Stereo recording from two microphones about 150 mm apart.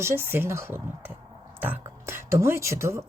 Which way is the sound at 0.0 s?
15° right (ahead or behind).